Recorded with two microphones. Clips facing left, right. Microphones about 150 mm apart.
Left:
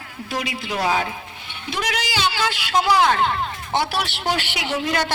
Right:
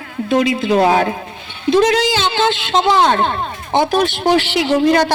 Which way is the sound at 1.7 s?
25° right (ahead or behind).